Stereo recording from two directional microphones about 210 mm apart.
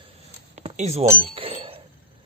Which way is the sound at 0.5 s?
35° right (ahead or behind).